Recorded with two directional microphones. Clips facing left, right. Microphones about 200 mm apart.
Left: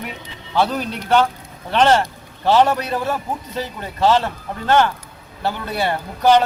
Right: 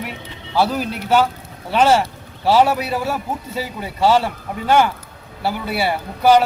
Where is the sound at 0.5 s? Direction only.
5° right (ahead or behind).